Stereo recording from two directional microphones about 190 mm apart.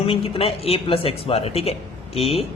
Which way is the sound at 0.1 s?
30° left (ahead or behind).